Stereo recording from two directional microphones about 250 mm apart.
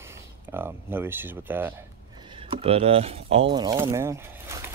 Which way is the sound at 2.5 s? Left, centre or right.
Right.